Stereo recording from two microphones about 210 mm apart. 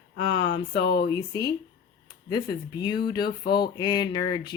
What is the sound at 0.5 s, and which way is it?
Speech, 55° left (ahead or behind).